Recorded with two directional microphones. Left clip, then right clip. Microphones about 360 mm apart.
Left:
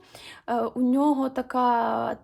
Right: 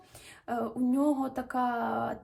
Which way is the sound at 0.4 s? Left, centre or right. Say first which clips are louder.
Left 6 dB; centre.